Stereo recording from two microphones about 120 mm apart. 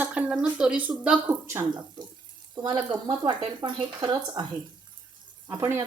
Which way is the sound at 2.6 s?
40° right (ahead or behind).